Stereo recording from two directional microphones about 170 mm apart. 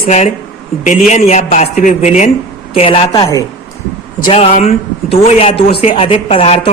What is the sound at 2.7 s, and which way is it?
Speech, 35° left (ahead or behind).